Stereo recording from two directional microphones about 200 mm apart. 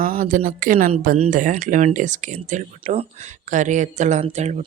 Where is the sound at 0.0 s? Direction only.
45° right (ahead or behind).